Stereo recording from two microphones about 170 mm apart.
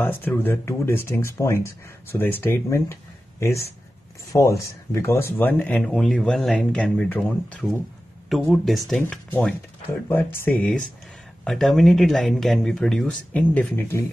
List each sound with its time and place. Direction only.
0.0 s speech: 10° left (ahead or behind)